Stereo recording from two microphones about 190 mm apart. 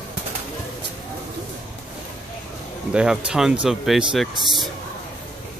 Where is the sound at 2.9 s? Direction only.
5° right (ahead or behind).